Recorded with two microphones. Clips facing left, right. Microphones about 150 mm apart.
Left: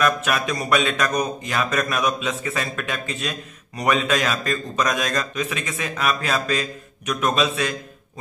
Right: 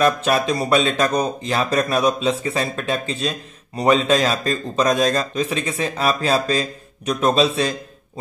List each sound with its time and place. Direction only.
0.0 s speech: 30° right (ahead or behind)